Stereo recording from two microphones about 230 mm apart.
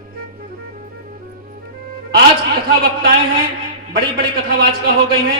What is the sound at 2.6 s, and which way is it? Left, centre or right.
A man's voice, right.